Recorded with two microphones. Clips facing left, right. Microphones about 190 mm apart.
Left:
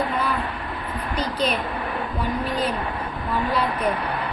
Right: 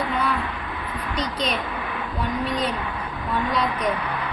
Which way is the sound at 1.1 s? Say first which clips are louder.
Left 2 dB; 5° left (ahead or behind).